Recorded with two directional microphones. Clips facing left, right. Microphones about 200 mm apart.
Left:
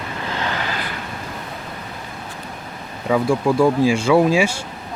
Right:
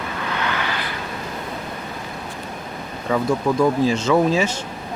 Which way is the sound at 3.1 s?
10° left (ahead or behind).